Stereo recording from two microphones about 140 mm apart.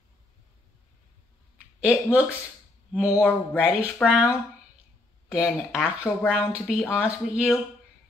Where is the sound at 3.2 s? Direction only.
15° left (ahead or behind).